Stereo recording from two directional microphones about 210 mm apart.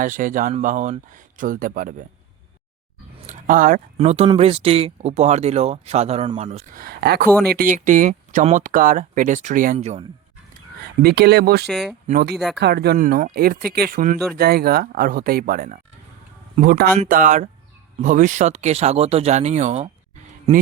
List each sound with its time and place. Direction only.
0.0 s speech: 40° right (ahead or behind)
3.2 s speech: 35° right (ahead or behind)
6.8 s speech: 50° right (ahead or behind); by 10.0 s 30° right (ahead or behind)
11.0 s speech: 50° right (ahead or behind)
11.6 s speech: centre (ahead or behind)
12.0 s speech: 45° right (ahead or behind)